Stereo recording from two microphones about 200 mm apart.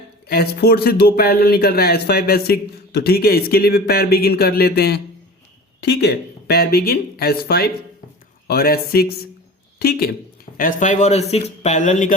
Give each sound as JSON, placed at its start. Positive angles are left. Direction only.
{"t": 0.3, "sound": "speech", "side_deg": 55}